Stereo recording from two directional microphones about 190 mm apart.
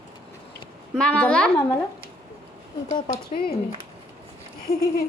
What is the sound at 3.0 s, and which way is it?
Speech, 25° left (ahead or behind).